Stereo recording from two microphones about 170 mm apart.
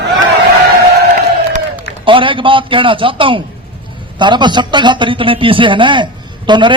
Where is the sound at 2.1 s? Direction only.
30° right (ahead or behind).